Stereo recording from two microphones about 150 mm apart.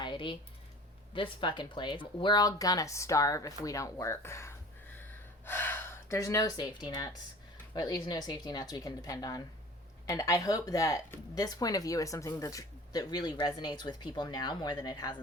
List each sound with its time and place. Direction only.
0.0 s computer keyboard: 35° left (ahead or behind)
1.1 s speech: 35° left (ahead or behind)